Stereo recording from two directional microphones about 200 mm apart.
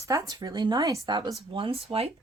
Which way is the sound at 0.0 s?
15° right (ahead or behind).